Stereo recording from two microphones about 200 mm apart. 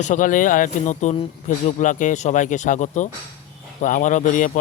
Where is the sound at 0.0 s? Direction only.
40° left (ahead or behind).